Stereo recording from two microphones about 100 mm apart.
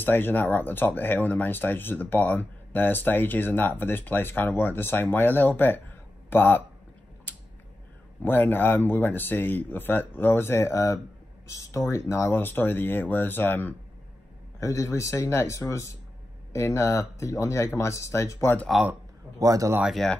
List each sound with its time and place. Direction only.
0.0 s speech: 20° left (ahead or behind)
5.6 s a sound: 20° left (ahead or behind)
8.2 s speech: 20° left (ahead or behind)
14.6 s speech: 30° left (ahead or behind)
19.3 s a man's voice: 35° right (ahead or behind)
19.8 s speech: centre (ahead or behind)